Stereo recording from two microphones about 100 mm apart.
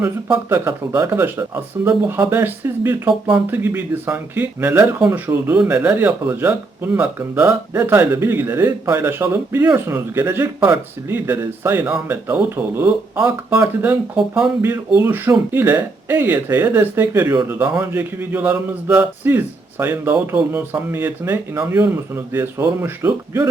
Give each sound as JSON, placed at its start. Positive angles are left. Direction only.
{"t": 0.5, "sound": "speech", "side_deg": -25}